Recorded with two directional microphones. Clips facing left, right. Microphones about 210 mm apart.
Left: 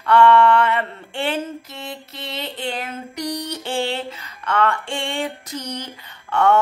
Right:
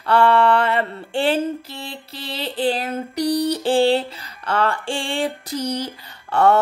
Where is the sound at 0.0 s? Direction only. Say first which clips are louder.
Left 2 dB; 35° right (ahead or behind).